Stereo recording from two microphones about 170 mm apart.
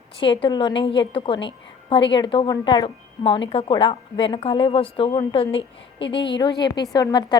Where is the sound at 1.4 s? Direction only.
30° left (ahead or behind).